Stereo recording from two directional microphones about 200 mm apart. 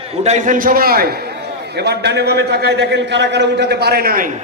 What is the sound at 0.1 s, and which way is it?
A man's voice, 35° right (ahead or behind).